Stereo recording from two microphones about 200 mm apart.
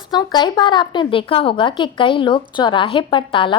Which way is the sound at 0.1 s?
20° left (ahead or behind).